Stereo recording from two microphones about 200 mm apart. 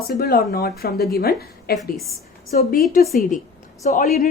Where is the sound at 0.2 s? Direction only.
50° left (ahead or behind).